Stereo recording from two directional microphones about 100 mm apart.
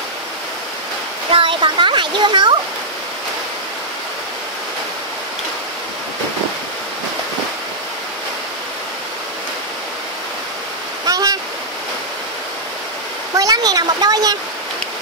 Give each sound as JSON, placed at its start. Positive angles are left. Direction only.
{"t": 1.3, "sound": "speech", "side_deg": -55}
{"t": 11.1, "sound": "waterfall", "side_deg": -40}
{"t": 13.4, "sound": "speech", "side_deg": -40}